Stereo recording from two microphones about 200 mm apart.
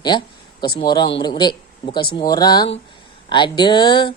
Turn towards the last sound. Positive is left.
turn(degrees=20)  # may be behind; listen again after turning